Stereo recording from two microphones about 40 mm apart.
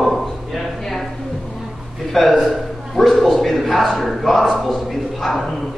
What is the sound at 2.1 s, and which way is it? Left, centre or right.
A man's voice, centre.